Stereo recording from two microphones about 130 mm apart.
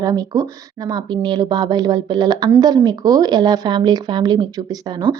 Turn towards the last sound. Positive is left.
turn(degrees=-35)  # may be behind; listen again after turning